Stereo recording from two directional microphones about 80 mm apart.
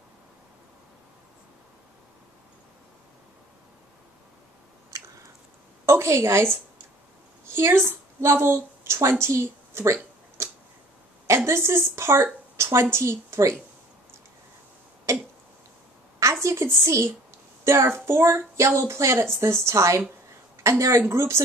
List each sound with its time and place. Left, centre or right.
5.9 s a woman's voice: right
9.9 s a sound: right
11.2 s speech: right
12.9 s child singing: right
15.1 s a sound: right
16.4 s child singing: right